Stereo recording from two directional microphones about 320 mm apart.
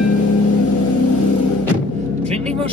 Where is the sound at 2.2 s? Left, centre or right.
Centre.